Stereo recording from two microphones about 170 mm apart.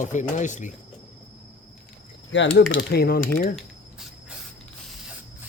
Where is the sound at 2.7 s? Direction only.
70° left (ahead or behind).